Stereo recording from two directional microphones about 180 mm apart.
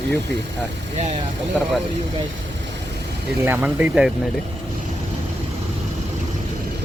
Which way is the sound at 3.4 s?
10° right (ahead or behind).